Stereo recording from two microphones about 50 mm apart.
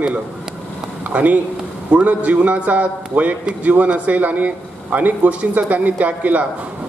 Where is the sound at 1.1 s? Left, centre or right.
Right.